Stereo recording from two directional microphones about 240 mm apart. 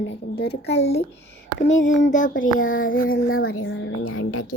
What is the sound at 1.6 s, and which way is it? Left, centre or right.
Speech, left.